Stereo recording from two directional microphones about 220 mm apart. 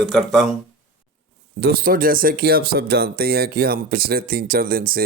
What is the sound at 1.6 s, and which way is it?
A man's voice, 40° right (ahead or behind).